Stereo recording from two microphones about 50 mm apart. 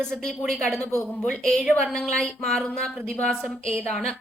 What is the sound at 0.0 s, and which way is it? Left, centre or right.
A woman's voice, centre.